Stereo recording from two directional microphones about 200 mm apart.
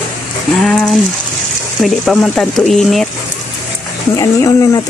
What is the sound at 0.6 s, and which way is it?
Speech, centre (ahead or behind).